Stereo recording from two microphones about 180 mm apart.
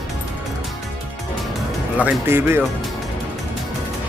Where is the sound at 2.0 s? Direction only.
10° right (ahead or behind).